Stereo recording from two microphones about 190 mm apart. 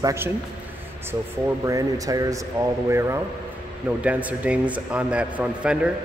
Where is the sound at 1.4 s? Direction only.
15° right (ahead or behind).